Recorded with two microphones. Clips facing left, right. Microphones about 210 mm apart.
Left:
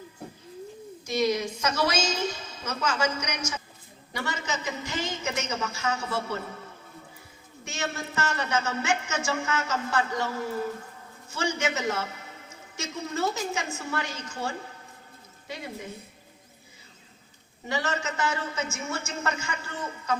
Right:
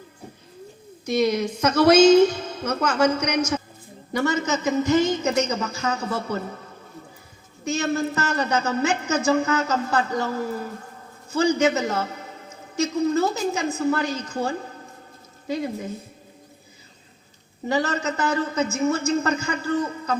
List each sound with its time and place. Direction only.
1.0 s a woman's voice: 60° right (ahead or behind)
4.1 s a man's voice: 45° right (ahead or behind)
7.6 s a man's voice: 35° right (ahead or behind)
17.7 s a man's voice: 35° right (ahead or behind)